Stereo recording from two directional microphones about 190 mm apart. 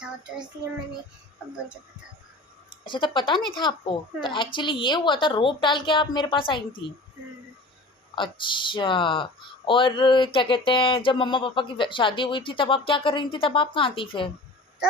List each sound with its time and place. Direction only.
2.8 s speech: 25° left (ahead or behind)
8.1 s speech: 25° left (ahead or behind)